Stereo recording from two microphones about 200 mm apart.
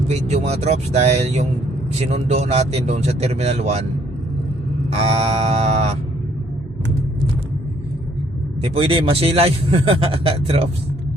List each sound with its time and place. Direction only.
0.1 s speech: 35° right (ahead or behind)
4.9 s speech: 30° right (ahead or behind)
8.6 s speech: 30° right (ahead or behind)